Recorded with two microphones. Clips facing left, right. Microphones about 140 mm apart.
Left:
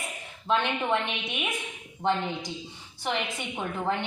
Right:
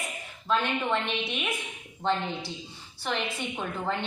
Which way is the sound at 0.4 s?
20° left (ahead or behind).